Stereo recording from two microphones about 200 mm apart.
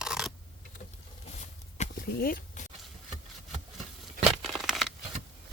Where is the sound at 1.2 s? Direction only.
35° left (ahead or behind).